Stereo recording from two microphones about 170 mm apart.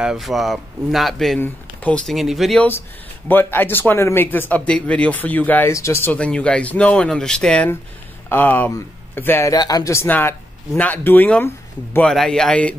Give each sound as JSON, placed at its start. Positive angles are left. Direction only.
{"t": 0.0, "sound": "speech", "side_deg": 0}
{"t": 3.3, "sound": "speech", "side_deg": 10}